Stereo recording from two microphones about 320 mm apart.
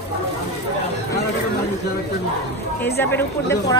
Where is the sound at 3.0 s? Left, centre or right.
Centre.